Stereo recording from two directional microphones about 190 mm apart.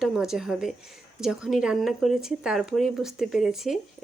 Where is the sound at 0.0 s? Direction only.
5° right (ahead or behind).